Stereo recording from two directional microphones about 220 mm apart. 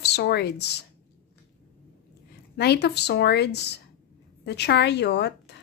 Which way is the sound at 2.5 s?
50° left (ahead or behind).